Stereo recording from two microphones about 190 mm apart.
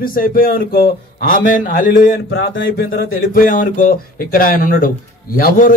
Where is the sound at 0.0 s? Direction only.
50° left (ahead or behind).